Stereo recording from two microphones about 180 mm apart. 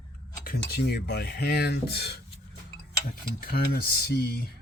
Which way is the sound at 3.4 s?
55° left (ahead or behind).